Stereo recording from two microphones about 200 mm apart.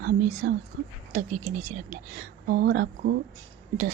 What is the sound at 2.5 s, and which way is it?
Speech, 50° right (ahead or behind).